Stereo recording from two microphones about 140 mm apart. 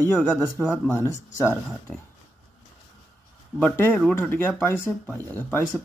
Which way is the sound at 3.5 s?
10° left (ahead or behind).